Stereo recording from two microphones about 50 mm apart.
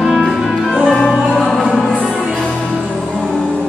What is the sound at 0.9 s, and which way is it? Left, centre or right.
Music, centre.